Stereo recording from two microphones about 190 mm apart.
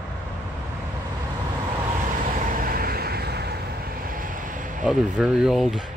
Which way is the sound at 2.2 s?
45° right (ahead or behind).